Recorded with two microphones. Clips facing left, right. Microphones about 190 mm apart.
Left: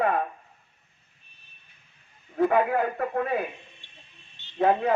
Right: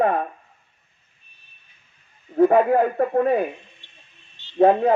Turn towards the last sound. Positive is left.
turn(degrees=-35)  # may be behind; listen again after turning